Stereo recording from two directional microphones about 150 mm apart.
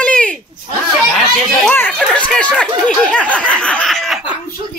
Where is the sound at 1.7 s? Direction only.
10° left (ahead or behind); by 4.4 s 5° right (ahead or behind).